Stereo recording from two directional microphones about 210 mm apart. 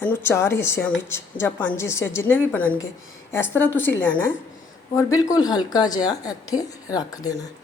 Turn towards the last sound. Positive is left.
turn(degrees=15)  # may be behind; listen again after turning